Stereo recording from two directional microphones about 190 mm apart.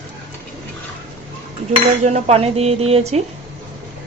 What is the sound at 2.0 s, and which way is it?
A woman's voice, 35° right (ahead or behind).